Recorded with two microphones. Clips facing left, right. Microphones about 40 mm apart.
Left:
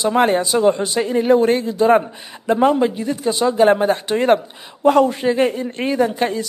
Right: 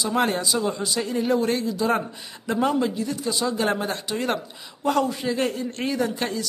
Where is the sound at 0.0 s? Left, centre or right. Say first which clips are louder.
Left 7 dB; left.